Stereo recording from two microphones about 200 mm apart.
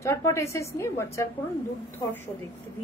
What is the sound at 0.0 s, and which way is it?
A woman's voice, 15° left (ahead or behind).